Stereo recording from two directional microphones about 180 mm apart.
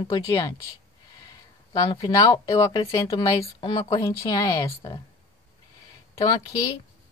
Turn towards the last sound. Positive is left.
turn(degrees=20)  # may be behind; listen again after turning